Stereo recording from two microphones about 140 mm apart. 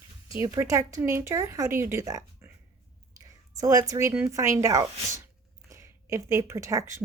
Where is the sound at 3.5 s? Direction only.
25° right (ahead or behind).